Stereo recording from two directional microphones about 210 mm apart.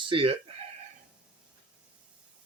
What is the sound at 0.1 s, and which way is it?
Speech, 25° right (ahead or behind).